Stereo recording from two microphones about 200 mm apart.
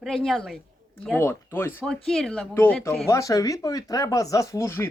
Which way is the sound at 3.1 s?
15° left (ahead or behind).